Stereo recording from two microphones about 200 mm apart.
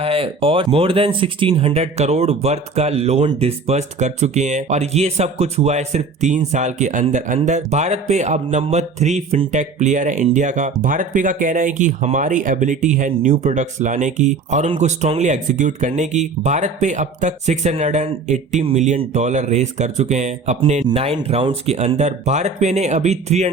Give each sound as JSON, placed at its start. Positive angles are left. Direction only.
{"t": 0.0, "sound": "speech", "side_deg": -30}